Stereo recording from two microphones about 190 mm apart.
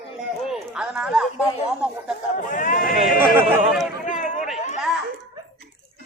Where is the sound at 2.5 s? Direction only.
45° left (ahead or behind).